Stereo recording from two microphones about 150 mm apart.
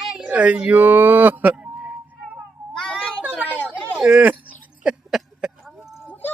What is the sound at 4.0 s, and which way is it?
Speech, 10° right (ahead or behind).